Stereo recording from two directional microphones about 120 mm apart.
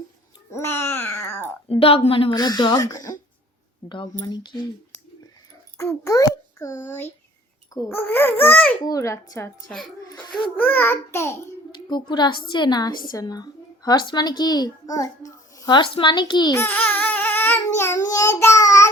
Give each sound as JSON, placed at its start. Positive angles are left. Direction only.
{"t": 0.5, "sound": "babbling", "side_deg": 20}
{"t": 1.7, "sound": "a woman's voice", "side_deg": 50}
{"t": 2.4, "sound": "a woman's voice", "side_deg": 35}
{"t": 5.7, "sound": "a child's voice", "side_deg": 25}
{"t": 8.8, "sound": "a child's voice", "side_deg": 30}
{"t": 9.6, "sound": "a child's voice", "side_deg": 0}
{"t": 10.6, "sound": "a child's voice", "side_deg": 15}
{"t": 11.7, "sound": "a woman's voice", "side_deg": 40}
{"t": 16.6, "sound": "speech", "side_deg": 15}